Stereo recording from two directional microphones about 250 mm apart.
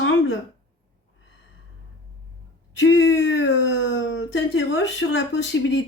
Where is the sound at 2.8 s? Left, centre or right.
Left.